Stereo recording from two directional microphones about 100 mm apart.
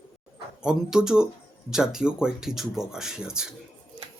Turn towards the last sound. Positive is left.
turn(degrees=-5)  # may be behind; listen again after turning